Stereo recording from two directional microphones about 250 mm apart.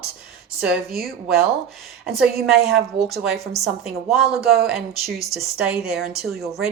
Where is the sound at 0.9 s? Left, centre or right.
Right.